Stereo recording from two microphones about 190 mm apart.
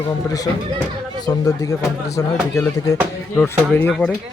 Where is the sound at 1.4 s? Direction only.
15° left (ahead or behind); by 4.2 s centre (ahead or behind).